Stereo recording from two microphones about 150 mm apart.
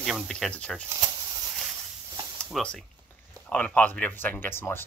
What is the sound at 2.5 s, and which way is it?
Speech, 5° left (ahead or behind).